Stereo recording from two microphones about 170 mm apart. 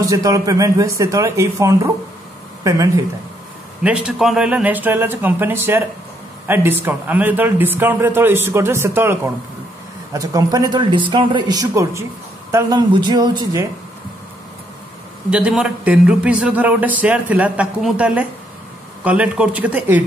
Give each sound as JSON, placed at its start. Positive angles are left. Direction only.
{"t": 0.1, "sound": "speech", "side_deg": -20}
{"t": 3.8, "sound": "a man's voice", "side_deg": -5}
{"t": 15.2, "sound": "a man's voice", "side_deg": -5}